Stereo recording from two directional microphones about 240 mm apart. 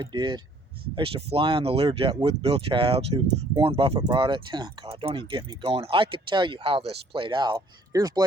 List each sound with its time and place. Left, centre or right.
0.1 s speech: centre